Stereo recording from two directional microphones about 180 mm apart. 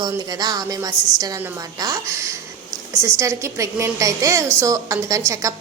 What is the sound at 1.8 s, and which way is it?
A woman's voice, 20° right (ahead or behind).